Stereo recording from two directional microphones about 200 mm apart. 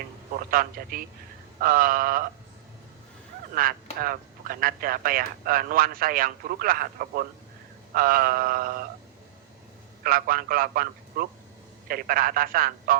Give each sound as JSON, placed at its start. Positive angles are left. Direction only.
{"t": 0.5, "sound": "a man's voice", "side_deg": -45}
{"t": 3.5, "sound": "a man's voice", "side_deg": -45}
{"t": 10.0, "sound": "a man's voice", "side_deg": -45}